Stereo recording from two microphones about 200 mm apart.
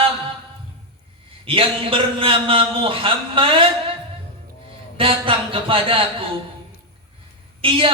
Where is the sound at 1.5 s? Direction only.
25° right (ahead or behind).